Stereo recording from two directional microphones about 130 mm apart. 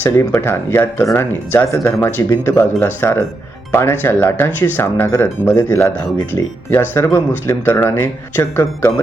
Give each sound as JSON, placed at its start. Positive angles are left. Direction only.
{"t": 0.0, "sound": "speech", "side_deg": 15}